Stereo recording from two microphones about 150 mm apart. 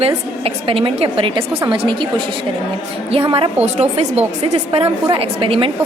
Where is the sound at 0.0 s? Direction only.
40° right (ahead or behind).